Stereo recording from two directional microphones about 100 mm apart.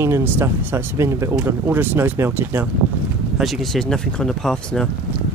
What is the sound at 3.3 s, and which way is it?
Speech, centre (ahead or behind).